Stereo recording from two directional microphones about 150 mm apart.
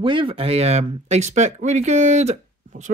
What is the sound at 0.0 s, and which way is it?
Speech, 35° right (ahead or behind).